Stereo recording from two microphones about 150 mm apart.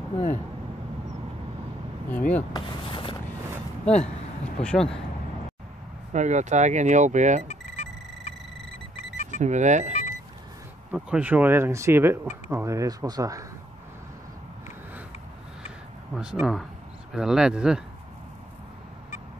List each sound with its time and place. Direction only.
2.0 s speech: 10° left (ahead or behind)
2.5 s a sound: 35° left (ahead or behind)
3.8 s speech: 5° left (ahead or behind)
6.1 s speech: 50° right (ahead or behind)
7.4 s a sound: 50° left (ahead or behind)
9.4 s speech: 55° right (ahead or behind)
10.9 s speech: 10° right (ahead or behind)
16.2 s speech: 5° right (ahead or behind)